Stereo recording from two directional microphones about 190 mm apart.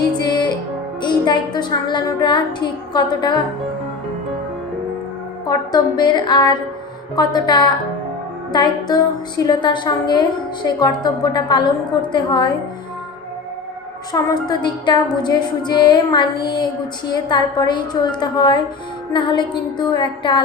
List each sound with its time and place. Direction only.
0.2 s music: 20° left (ahead or behind)
1.0 s a woman's voice: 20° left (ahead or behind)
5.5 s a woman's voice: 20° left (ahead or behind)
14.1 s a woman's voice: 20° left (ahead or behind)